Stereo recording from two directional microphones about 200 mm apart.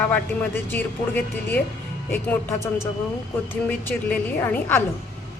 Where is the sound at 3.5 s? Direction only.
10° left (ahead or behind).